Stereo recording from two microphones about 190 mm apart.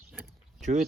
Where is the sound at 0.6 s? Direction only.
35° right (ahead or behind).